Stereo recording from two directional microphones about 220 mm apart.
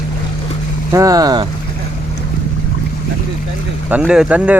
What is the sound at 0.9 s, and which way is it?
Speech, 15° right (ahead or behind).